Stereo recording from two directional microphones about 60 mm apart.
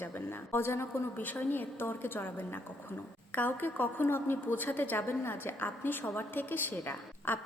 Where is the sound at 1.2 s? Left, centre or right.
Left.